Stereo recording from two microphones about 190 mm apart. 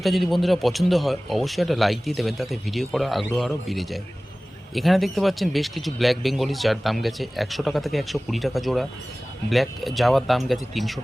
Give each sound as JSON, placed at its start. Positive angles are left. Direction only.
{"t": 0.0, "sound": "speech", "side_deg": 0}